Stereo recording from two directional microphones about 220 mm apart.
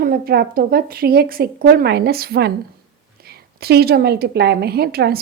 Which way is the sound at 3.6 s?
45° right (ahead or behind).